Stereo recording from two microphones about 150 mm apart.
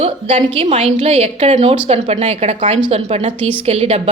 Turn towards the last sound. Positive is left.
turn(degrees=-45)  # may be behind; listen again after turning